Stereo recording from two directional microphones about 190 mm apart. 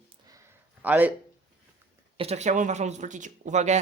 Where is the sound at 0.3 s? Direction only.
15° right (ahead or behind).